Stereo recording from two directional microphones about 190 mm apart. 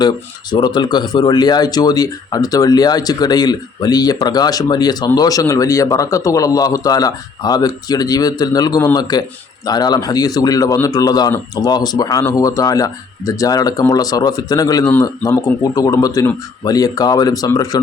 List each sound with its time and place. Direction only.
0.5 s speech: 25° left (ahead or behind)